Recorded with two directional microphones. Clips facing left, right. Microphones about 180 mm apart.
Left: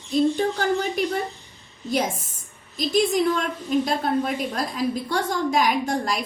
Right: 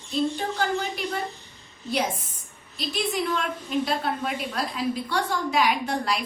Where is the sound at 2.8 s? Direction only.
45° left (ahead or behind).